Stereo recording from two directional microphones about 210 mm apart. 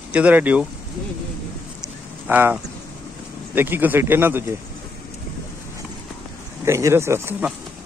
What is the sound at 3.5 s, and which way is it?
A man's voice, 10° right (ahead or behind).